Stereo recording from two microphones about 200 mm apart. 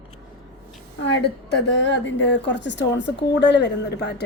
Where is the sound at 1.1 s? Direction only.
60° left (ahead or behind).